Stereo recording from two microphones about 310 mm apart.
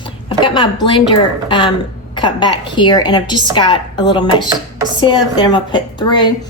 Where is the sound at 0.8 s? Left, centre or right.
Centre.